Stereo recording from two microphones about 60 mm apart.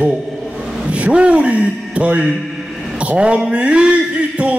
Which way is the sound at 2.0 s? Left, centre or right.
Centre.